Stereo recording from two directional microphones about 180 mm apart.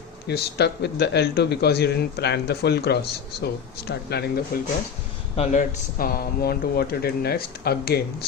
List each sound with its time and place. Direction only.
0.3 s speech: 65° left (ahead or behind)
4.5 s speech: 55° left (ahead or behind)
5.4 s speech: 40° left (ahead or behind); by 8.0 s 60° left (ahead or behind)